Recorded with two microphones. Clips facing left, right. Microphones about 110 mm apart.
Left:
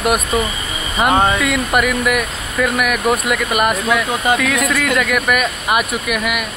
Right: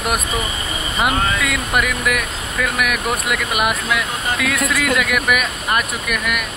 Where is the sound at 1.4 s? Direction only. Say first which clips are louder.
Left 4 dB; centre (ahead or behind).